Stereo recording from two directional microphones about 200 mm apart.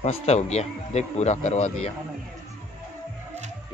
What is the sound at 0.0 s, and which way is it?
Speech, 30° left (ahead or behind).